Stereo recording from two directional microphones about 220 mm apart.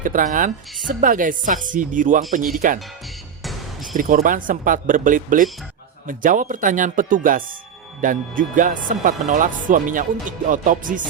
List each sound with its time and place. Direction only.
0.0 s speech: 35° right (ahead or behind)
3.4 s music: centre (ahead or behind)
3.9 s speech: 40° right (ahead or behind)